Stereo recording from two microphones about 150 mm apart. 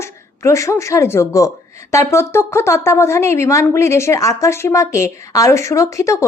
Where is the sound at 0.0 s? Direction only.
20° left (ahead or behind).